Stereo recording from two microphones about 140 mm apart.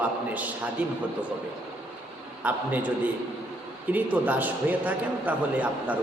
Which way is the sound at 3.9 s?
10° right (ahead or behind).